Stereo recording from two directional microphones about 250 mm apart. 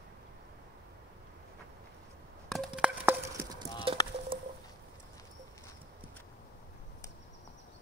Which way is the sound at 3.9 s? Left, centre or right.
Right.